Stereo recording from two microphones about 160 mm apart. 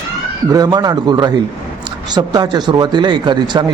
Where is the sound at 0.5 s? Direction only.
25° right (ahead or behind).